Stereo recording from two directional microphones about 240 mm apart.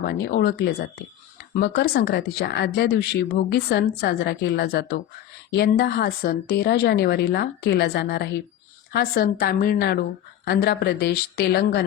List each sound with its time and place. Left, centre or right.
0.0 s a woman's voice: left